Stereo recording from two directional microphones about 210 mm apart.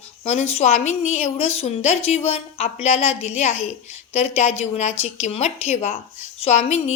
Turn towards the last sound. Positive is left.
turn(degrees=30)  # may be behind; listen again after turning